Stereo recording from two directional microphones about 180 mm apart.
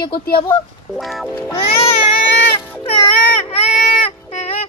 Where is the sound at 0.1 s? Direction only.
55° left (ahead or behind).